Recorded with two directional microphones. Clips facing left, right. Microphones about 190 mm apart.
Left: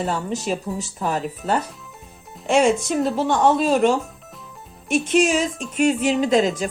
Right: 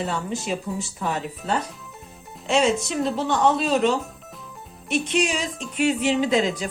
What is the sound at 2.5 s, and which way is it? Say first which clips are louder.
A woman's voice: left 3 dB; 50° left (ahead or behind).